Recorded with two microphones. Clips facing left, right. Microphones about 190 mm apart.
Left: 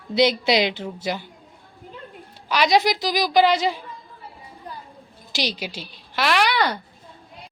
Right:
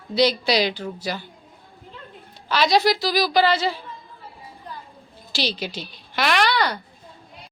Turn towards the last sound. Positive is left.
turn(degrees=15)  # may be behind; listen again after turning